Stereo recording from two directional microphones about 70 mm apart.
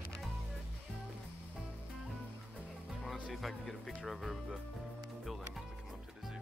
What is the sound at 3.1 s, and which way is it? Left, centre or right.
Speech, centre.